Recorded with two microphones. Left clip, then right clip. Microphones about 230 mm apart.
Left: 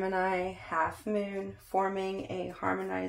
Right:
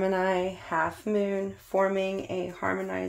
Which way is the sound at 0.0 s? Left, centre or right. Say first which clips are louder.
Right 4 dB; right.